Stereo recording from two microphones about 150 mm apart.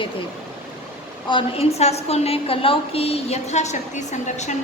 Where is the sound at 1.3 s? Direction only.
45° left (ahead or behind).